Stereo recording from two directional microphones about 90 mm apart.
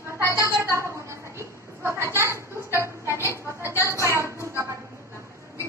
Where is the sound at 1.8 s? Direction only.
25° right (ahead or behind).